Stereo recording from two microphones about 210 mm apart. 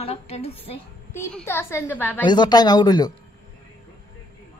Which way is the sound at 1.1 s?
10° left (ahead or behind).